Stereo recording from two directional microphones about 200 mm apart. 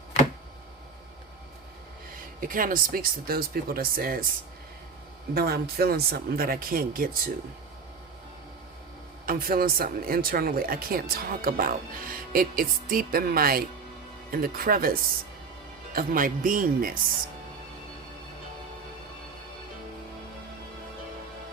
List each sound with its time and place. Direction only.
2.4 s speech: 45° right (ahead or behind)
5.3 s speech: 50° right (ahead or behind)
9.2 s speech: 45° right (ahead or behind)
16.0 s speech: 45° right (ahead or behind)